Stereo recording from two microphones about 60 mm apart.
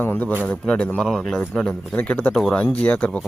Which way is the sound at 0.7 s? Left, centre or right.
Centre.